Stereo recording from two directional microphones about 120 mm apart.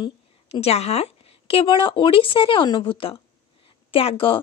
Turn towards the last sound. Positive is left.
turn(degrees=45)  # may be behind; listen again after turning